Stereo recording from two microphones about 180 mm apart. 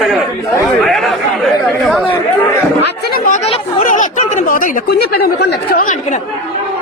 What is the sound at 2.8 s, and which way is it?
Speech, 60° left (ahead or behind).